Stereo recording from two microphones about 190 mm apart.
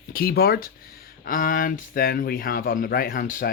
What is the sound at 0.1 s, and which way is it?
Speech, 50° left (ahead or behind).